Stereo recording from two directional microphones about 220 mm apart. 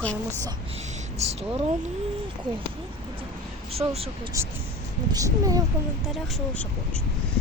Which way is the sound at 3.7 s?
25° right (ahead or behind).